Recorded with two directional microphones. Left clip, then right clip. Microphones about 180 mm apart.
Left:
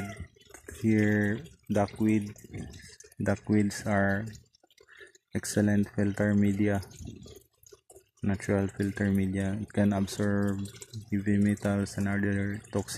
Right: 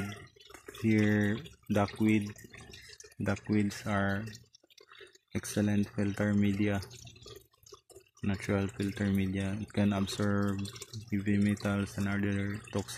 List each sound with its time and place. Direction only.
0.5 s speech: 5° left (ahead or behind)
3.3 s speech: 5° left (ahead or behind)
5.3 s speech: 10° left (ahead or behind)
8.2 s speech: 5° left (ahead or behind)